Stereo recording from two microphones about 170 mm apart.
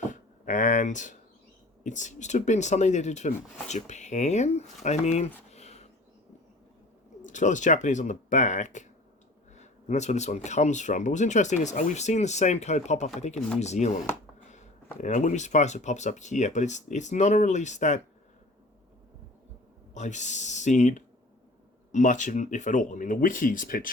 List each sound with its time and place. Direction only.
0.0 s a sound: 50° left (ahead or behind)
1.8 s speech: 45° left (ahead or behind)
5.5 s a sound: 40° left (ahead or behind)
7.3 s speech: 45° left (ahead or behind)
15.0 s speech: 45° left (ahead or behind)
19.9 s speech: 45° left (ahead or behind)